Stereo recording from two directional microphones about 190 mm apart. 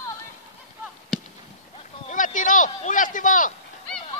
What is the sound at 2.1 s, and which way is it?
Speech, 45° left (ahead or behind).